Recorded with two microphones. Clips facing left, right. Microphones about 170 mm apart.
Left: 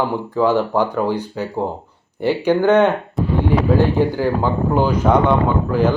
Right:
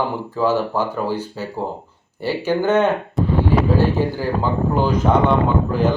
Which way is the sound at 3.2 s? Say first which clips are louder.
Right 1 dB; centre (ahead or behind).